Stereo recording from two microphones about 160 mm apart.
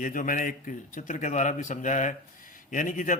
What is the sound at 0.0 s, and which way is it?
A man's voice, 55° left (ahead or behind).